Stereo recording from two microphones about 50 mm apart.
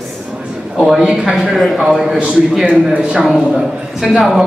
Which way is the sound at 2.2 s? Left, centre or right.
Centre.